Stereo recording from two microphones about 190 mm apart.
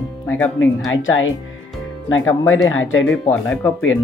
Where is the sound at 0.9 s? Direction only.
90° left.